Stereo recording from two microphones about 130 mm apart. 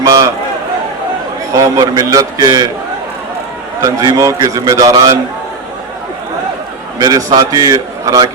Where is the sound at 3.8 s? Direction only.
25° right (ahead or behind).